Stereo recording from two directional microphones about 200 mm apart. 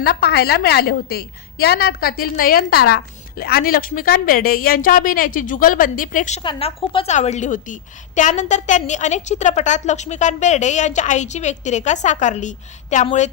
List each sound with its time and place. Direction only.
0.0 s a woman's voice: 50° left (ahead or behind)
6.4 s a woman's voice: 25° left (ahead or behind)